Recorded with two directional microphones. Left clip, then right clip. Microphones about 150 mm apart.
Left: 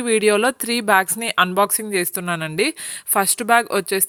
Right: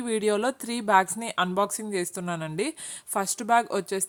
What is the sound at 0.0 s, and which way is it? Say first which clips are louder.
Speech: left 9 dB; 20° left (ahead or behind).